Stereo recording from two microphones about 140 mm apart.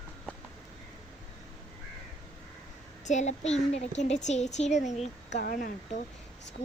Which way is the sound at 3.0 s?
55° left (ahead or behind).